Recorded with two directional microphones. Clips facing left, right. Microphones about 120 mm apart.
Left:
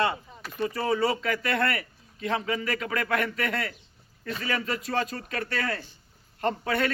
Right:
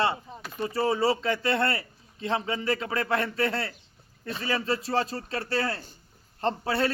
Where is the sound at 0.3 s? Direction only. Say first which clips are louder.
Right 5 dB; 30° right (ahead or behind).